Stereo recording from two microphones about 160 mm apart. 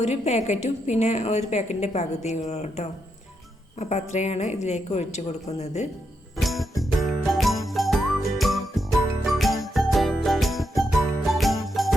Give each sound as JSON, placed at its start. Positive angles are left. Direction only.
{"t": 0.0, "sound": "a woman's voice", "side_deg": 45}
{"t": 6.3, "sound": "music", "side_deg": 0}
{"t": 7.3, "sound": "jingle", "side_deg": 0}